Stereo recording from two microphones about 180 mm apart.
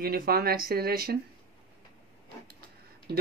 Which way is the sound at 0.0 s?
55° right (ahead or behind).